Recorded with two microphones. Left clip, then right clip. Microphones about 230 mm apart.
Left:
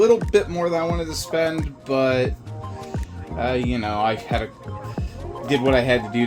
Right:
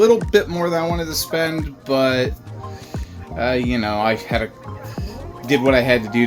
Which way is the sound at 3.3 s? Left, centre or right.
Centre.